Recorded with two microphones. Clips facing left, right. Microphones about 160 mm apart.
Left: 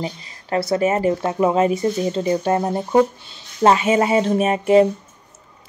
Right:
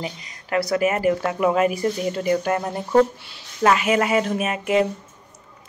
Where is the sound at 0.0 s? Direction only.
30° left (ahead or behind).